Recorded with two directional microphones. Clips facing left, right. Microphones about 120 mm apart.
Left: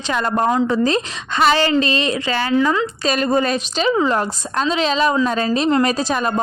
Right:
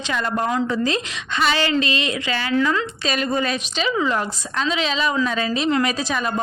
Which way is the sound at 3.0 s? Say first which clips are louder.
Left 5 dB; 40° left (ahead or behind).